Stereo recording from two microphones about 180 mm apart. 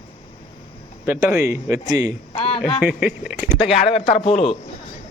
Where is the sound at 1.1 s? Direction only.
15° right (ahead or behind).